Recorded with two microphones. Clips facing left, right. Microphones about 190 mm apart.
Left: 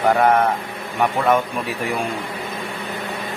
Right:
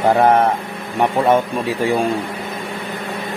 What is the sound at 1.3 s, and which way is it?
Speech, 30° right (ahead or behind).